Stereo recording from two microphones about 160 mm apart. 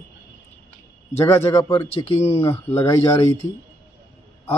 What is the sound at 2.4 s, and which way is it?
Speech, 15° left (ahead or behind).